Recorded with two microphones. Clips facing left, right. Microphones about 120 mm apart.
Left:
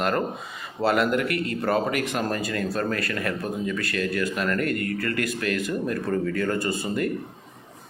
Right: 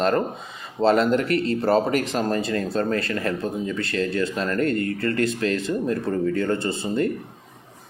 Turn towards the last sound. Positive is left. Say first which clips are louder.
# right 2 dB
turn(degrees=-25)  # may be behind; listen again after turning